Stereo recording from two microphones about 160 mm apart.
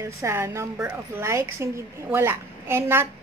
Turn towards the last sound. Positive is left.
turn(degrees=-15)  # may be behind; listen again after turning